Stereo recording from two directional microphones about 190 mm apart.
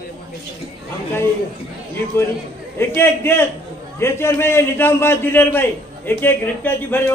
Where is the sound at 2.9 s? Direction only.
10° left (ahead or behind).